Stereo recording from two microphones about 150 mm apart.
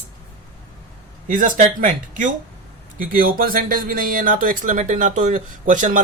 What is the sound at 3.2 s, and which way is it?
Speech, 70° right (ahead or behind).